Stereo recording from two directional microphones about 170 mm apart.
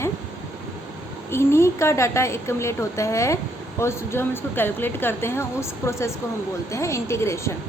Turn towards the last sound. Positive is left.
turn(degrees=15)  # may be behind; listen again after turning